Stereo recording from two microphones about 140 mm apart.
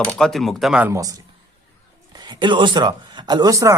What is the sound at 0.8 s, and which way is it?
Speech, 20° right (ahead or behind).